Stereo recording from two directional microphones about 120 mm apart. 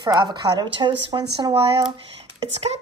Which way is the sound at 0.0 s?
35° right (ahead or behind).